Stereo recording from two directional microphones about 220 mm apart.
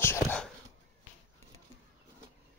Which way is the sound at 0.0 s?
10° left (ahead or behind).